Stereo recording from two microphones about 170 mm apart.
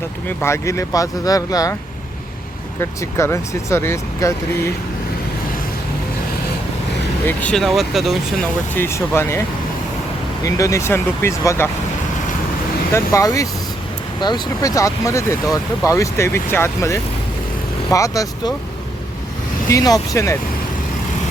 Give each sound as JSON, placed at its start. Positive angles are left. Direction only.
{"t": 0.3, "sound": "speech", "side_deg": 15}
{"t": 3.0, "sound": "speech", "side_deg": 15}
{"t": 7.3, "sound": "speech", "side_deg": 5}
{"t": 8.7, "sound": "speech", "side_deg": 15}
{"t": 10.4, "sound": "speech", "side_deg": 20}
{"t": 12.9, "sound": "speech", "side_deg": 20}
{"t": 19.6, "sound": "speech", "side_deg": 20}